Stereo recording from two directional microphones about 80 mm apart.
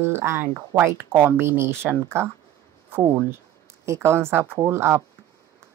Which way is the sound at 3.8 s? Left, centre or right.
Right.